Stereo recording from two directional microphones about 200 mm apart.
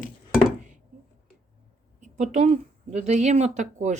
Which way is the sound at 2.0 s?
35° right (ahead or behind).